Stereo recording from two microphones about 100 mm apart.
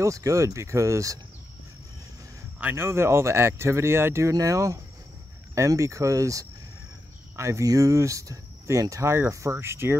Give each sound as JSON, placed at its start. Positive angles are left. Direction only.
{"t": 0.0, "sound": "speech", "side_deg": -35}
{"t": 2.6, "sound": "speech", "side_deg": -25}